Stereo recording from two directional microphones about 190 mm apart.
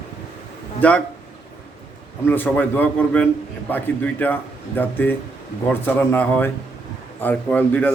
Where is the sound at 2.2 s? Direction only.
10° left (ahead or behind).